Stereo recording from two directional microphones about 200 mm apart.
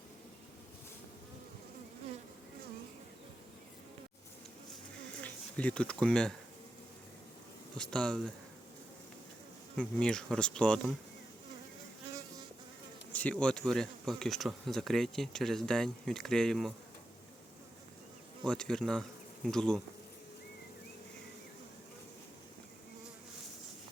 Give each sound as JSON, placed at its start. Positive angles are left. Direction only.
{"t": 5.2, "sound": "speech", "side_deg": 5}
{"t": 7.8, "sound": "speech", "side_deg": 5}
{"t": 9.7, "sound": "speech", "side_deg": 5}
{"t": 13.1, "sound": "speech", "side_deg": 5}
{"t": 18.4, "sound": "speech", "side_deg": 5}